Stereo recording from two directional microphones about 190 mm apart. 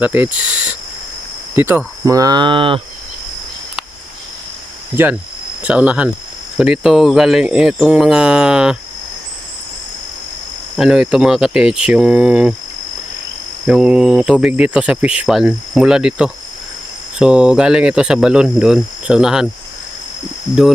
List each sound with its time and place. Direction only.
0.0 s cricket: 10° right (ahead or behind)
1.5 s speech: 10° right (ahead or behind); by 2.8 s 25° right (ahead or behind)
5.6 s speech: 5° right (ahead or behind)
10.8 s speech: 5° right (ahead or behind)
13.7 s speech: 5° right (ahead or behind)